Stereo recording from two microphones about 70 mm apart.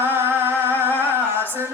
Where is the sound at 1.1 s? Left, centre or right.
Right.